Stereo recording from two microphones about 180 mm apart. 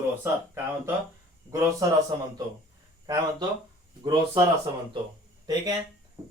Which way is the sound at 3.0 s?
20° right (ahead or behind).